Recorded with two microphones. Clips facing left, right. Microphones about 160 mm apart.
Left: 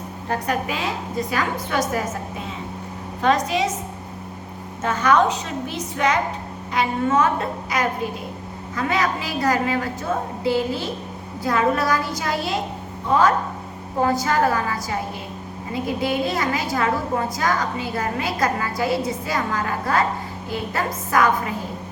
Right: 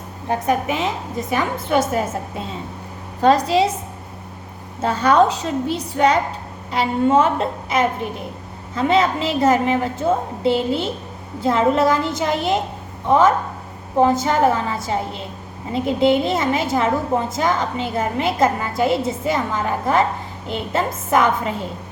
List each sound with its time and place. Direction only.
0.3 s a woman's voice: 20° right (ahead or behind)
3.2 s a woman's voice: 35° right (ahead or behind)
4.8 s a woman's voice: 30° right (ahead or behind)